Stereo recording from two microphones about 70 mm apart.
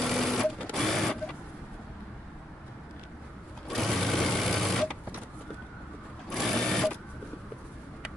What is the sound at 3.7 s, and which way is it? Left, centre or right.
Sewing machine, centre.